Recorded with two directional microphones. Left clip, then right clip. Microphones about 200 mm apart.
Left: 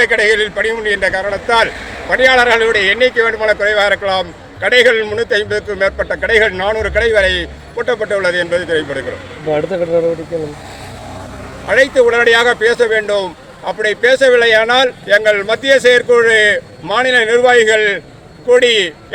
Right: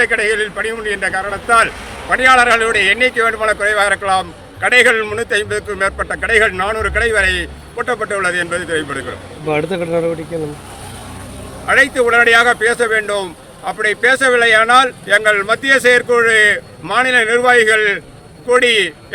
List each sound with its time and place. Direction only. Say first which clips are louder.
0.0 s speech: left 3 dB; 5° right (ahead or behind)
9.5 s speech: left 3 dB; 45° right (ahead or behind)
11.7 s speech: left 1 dB; 10° right (ahead or behind)